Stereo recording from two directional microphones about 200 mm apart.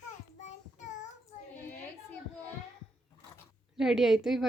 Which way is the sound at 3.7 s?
Centre (ahead or behind).